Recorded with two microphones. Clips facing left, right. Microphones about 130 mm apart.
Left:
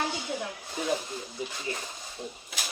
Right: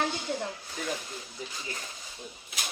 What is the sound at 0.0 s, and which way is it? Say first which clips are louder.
Speech: right 1 dB; 20° left (ahead or behind).